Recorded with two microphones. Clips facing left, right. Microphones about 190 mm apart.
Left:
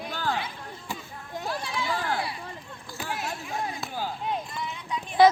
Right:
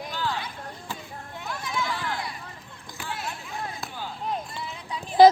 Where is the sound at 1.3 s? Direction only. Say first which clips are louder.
Left 1 dB; 35° left (ahead or behind).